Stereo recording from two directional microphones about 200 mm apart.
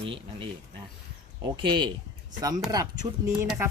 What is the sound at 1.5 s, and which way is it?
A woman's voice, 25° right (ahead or behind).